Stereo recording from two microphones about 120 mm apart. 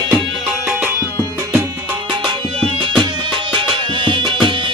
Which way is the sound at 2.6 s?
45° right (ahead or behind).